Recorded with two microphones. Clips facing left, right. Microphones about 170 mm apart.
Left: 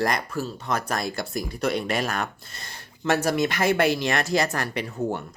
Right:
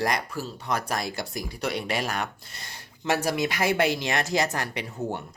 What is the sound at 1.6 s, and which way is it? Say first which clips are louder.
Speech: left 4 dB; 45° left (ahead or behind).